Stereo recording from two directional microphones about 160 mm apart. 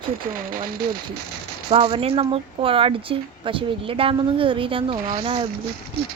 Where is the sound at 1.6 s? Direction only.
35° right (ahead or behind).